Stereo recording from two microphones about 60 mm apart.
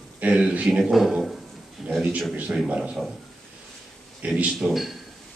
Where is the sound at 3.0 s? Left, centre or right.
Centre.